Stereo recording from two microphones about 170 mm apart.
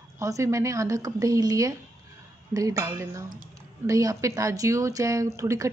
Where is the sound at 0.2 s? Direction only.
20° right (ahead or behind).